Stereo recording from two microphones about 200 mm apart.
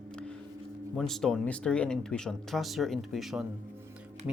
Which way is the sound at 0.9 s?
Centre (ahead or behind).